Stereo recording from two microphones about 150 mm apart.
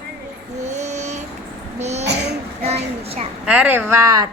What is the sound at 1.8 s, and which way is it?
Babbling, 50° right (ahead or behind).